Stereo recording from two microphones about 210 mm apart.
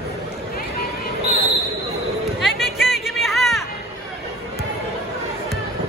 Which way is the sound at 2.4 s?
Centre (ahead or behind).